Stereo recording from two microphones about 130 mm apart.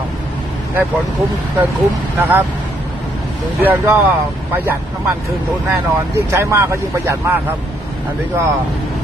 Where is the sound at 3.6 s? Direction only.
15° right (ahead or behind).